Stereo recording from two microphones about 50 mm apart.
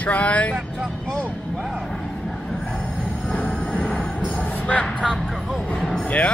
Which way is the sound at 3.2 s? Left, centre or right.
Left.